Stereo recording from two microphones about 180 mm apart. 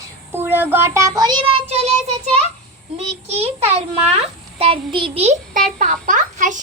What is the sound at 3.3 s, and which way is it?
A child's voice, 35° right (ahead or behind).